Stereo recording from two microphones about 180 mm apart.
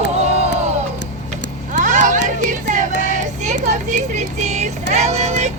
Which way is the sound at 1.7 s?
45° right (ahead or behind).